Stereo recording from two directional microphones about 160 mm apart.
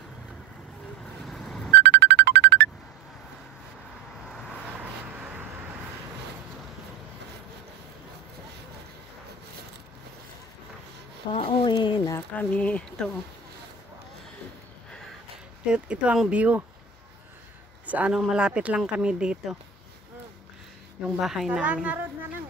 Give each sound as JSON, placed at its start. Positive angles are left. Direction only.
{"t": 1.2, "sound": "a sound", "side_deg": 0}
{"t": 1.8, "sound": "music", "side_deg": -90}
{"t": 4.3, "sound": "vehicle", "side_deg": 0}
{"t": 11.3, "sound": "a sound", "side_deg": 30}
{"t": 12.4, "sound": "speech", "side_deg": 10}
{"t": 15.6, "sound": "speech", "side_deg": -5}
{"t": 17.8, "sound": "speech", "side_deg": -10}
{"t": 21.2, "sound": "speech", "side_deg": 0}